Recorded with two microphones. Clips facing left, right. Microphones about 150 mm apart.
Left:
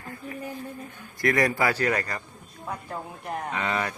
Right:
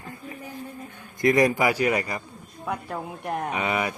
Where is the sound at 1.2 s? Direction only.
20° right (ahead or behind).